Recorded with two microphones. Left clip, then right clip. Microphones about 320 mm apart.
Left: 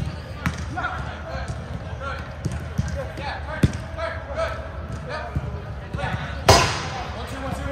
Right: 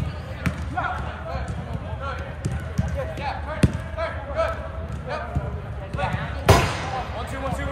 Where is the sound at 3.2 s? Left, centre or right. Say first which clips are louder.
Even; right.